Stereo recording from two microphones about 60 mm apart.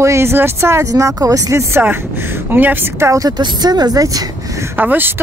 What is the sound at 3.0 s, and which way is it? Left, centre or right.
Speech, right.